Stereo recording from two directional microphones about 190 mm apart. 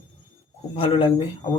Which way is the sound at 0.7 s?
30° left (ahead or behind).